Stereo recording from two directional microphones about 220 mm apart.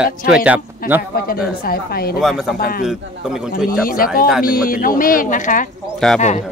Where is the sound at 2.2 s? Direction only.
Centre (ahead or behind).